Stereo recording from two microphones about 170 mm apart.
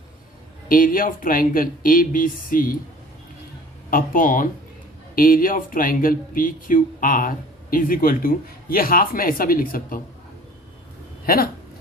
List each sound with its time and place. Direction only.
0.7 s speech: 55° left (ahead or behind)
3.8 s speech: 55° left (ahead or behind)